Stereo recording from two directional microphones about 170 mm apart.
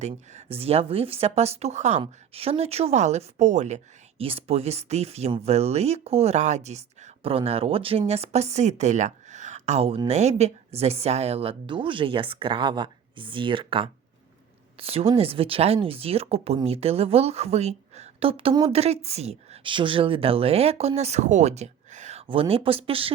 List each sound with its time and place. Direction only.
0.0 s speech: 40° right (ahead or behind)
4.2 s speech: 35° right (ahead or behind)